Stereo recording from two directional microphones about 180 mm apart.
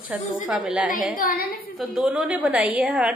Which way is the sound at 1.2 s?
50° left (ahead or behind).